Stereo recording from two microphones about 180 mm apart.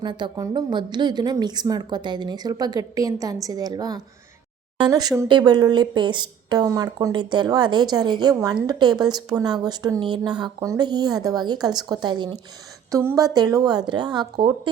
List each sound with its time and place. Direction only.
0.0 s speech: 25° right (ahead or behind)